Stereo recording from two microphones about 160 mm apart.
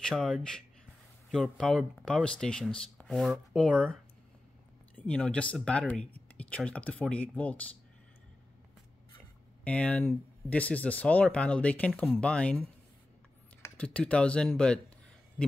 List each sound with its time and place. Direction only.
0.0 s speech: centre (ahead or behind)
9.7 s speech: 10° left (ahead or behind)